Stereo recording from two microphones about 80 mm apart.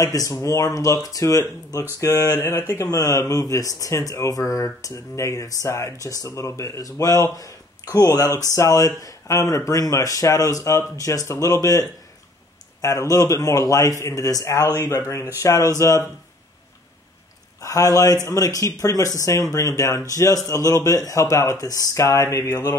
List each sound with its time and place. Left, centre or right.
0.0 s speech: left
2.0 s speech: left
2.7 s speech: left
17.6 s speech: left